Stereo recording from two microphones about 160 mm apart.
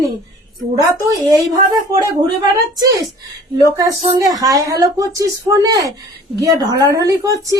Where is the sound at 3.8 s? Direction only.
25° right (ahead or behind).